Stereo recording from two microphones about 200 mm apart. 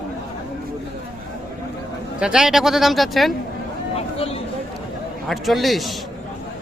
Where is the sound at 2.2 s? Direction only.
5° right (ahead or behind).